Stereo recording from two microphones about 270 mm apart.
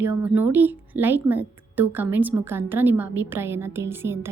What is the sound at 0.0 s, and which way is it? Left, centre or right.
A woman's voice, centre.